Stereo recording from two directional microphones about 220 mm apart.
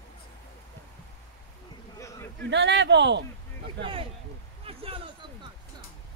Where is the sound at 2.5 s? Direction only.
55° right (ahead or behind).